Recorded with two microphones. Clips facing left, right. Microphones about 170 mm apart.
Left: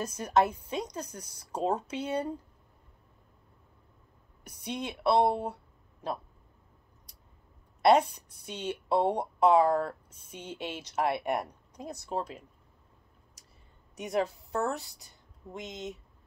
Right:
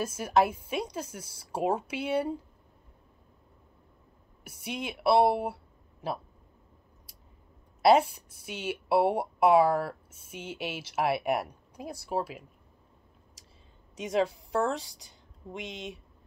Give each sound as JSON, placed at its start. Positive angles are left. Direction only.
{"t": 0.0, "sound": "speech", "side_deg": -10}
{"t": 4.5, "sound": "speech", "side_deg": -5}
{"t": 7.8, "sound": "a woman's voice", "side_deg": -5}
{"t": 14.3, "sound": "speech", "side_deg": -90}